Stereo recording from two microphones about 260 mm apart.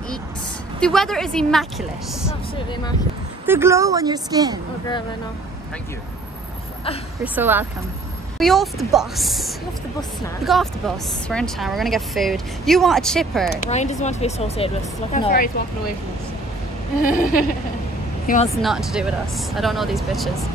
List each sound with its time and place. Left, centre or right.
0.7 s a woman's voice: centre
3.4 s a woman's voice: centre
7.3 s a woman's voice: centre
13.7 s speech: left
15.1 s a sound: left
17.0 s a sound: left
18.2 s speech: left
18.6 s a woman's voice: centre